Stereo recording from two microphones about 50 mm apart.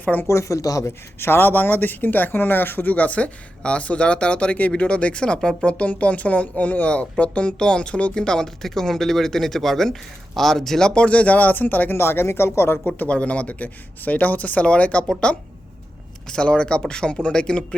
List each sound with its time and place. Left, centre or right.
0.0 s speech: left
0.3 s speech: left
1.2 s speech: left
11.9 s speech: left
13.0 s speech: left
16.3 s speech: centre